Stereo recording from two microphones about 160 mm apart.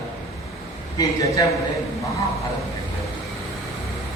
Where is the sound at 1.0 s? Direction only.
20° left (ahead or behind).